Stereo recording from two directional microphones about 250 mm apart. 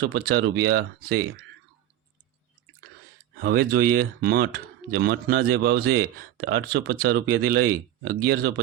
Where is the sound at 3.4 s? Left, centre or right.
Right.